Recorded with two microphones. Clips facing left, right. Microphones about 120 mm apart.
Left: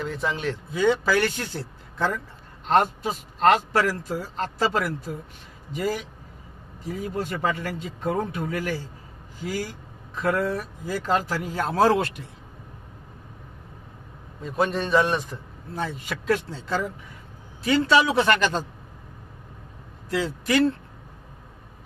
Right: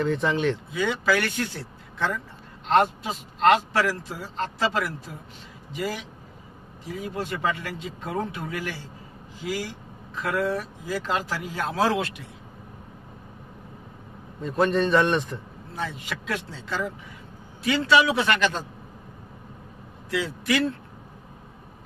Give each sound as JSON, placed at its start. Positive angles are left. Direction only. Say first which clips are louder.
{"t": 0.0, "sound": "a man's voice", "louder": "right 4 dB", "side_deg": 0}
{"t": 0.7, "sound": "a man's voice", "louder": "left 3 dB", "side_deg": 35}
{"t": 10.8, "sound": "speech", "louder": "left 4 dB", "side_deg": 40}
{"t": 14.4, "sound": "a man's voice", "louder": "right 3 dB", "side_deg": 5}
{"t": 16.5, "sound": "a man's voice", "louder": "left 2 dB", "side_deg": 45}
{"t": 20.1, "sound": "a man's voice", "louder": "left 1 dB", "side_deg": 40}